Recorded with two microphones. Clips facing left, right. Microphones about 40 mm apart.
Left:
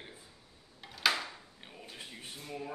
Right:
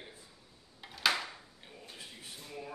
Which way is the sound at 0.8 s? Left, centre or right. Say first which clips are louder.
Left 1 dB; centre.